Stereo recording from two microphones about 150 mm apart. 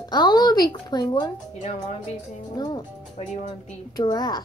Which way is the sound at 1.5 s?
50° left (ahead or behind).